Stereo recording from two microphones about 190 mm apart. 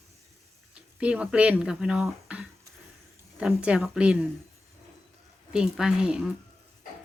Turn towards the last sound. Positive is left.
turn(degrees=-5)  # may be behind; listen again after turning